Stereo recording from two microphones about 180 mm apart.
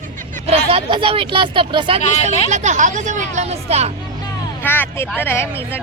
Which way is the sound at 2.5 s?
40° right (ahead or behind).